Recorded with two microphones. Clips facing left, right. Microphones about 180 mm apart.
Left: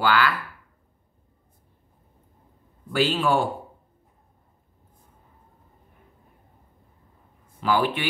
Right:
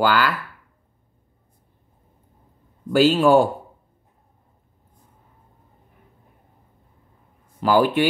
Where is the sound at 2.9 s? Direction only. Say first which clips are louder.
Right 7 dB; 45° right (ahead or behind).